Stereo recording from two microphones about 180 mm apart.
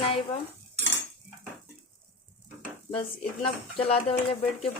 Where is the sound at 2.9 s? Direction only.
30° left (ahead or behind).